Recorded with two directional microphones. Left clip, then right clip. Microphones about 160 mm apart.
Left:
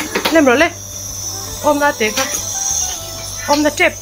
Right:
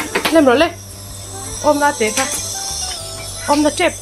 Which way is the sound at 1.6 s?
10° left (ahead or behind).